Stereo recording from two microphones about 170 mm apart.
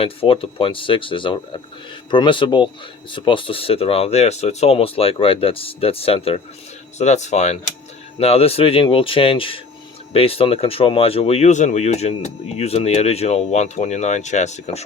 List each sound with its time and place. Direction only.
0.0 s speech: 30° left (ahead or behind)